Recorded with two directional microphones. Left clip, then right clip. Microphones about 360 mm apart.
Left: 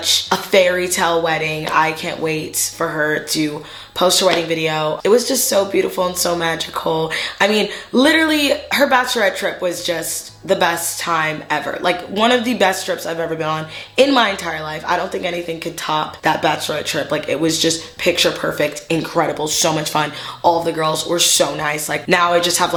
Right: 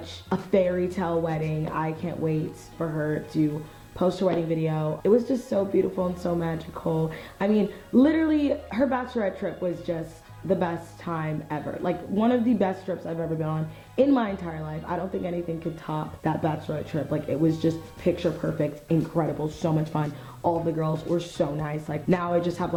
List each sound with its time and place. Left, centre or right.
0.0 s a woman's voice: centre
6.7 s speech: centre
7.1 s a woman's voice: centre
20.4 s a woman's voice: centre